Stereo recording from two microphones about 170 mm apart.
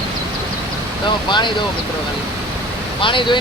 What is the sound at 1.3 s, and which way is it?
Speech, 25° left (ahead or behind).